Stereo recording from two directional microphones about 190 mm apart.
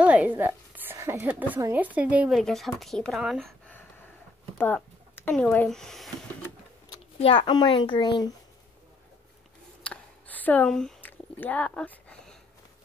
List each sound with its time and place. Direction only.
0.0 s a woman's voice: 5° right (ahead or behind)
7.2 s a child's voice: 30° left (ahead or behind)
9.8 s a sound: 10° left (ahead or behind)